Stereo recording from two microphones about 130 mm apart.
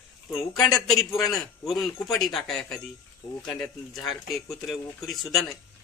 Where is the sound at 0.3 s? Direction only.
5° left (ahead or behind).